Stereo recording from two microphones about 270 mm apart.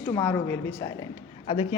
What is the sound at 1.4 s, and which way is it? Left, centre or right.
Speech, left.